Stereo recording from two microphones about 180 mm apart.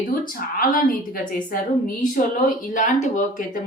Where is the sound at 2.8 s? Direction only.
45° left (ahead or behind).